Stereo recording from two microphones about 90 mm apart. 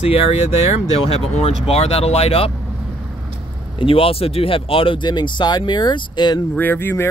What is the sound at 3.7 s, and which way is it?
Speech, 90° left.